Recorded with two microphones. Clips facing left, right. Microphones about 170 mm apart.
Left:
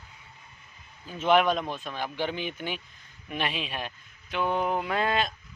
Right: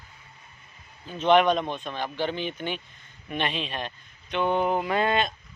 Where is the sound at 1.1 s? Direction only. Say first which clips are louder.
Right 3 dB; 5° left (ahead or behind).